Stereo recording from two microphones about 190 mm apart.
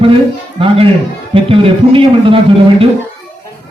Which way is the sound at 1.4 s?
25° right (ahead or behind).